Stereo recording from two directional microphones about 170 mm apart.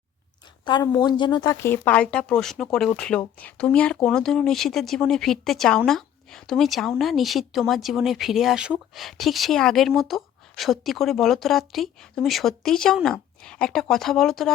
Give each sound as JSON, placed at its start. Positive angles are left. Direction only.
{"t": 0.6, "sound": "a woman's voice", "side_deg": 25}
{"t": 1.5, "sound": "speech", "side_deg": 15}